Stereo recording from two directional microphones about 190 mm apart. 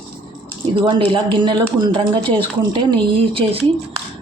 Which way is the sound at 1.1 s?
25° right (ahead or behind).